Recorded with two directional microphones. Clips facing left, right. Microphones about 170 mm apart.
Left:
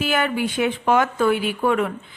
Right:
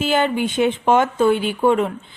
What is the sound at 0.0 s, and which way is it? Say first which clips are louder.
Speech: right 3 dB; 25° right (ahead or behind).